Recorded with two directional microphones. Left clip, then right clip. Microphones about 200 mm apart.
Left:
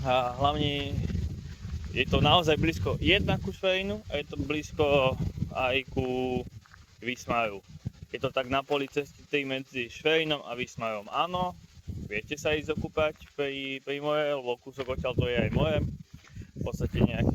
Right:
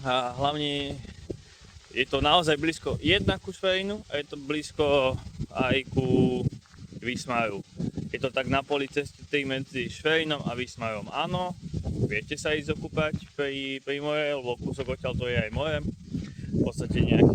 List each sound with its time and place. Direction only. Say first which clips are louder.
0.0 s speech: even; 20° right (ahead or behind)